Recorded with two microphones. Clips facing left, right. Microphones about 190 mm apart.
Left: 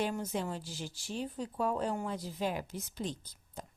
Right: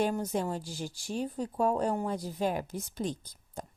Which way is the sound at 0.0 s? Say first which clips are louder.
Right 5 dB; 40° right (ahead or behind).